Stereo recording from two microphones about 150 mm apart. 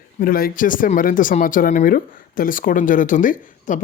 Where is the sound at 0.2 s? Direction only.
75° left (ahead or behind).